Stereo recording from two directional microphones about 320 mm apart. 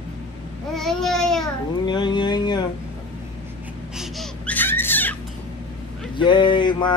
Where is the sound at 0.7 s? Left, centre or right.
Centre.